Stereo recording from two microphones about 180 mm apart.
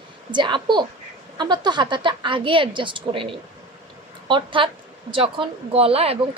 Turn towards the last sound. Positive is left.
turn(degrees=-35)  # may be behind; listen again after turning